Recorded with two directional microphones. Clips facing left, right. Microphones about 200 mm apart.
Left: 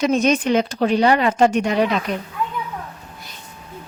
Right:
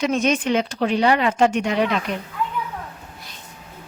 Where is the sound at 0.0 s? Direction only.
40° left (ahead or behind).